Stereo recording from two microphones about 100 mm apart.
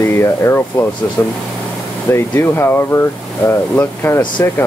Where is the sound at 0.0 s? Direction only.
25° left (ahead or behind).